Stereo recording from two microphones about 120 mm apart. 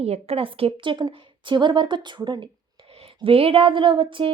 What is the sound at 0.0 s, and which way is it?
A woman's voice, 55° right (ahead or behind).